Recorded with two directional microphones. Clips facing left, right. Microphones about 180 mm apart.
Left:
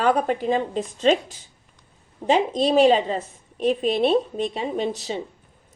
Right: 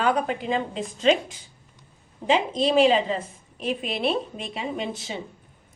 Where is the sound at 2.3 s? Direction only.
40° left (ahead or behind).